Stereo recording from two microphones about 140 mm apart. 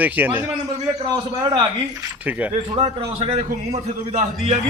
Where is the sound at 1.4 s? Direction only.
35° right (ahead or behind).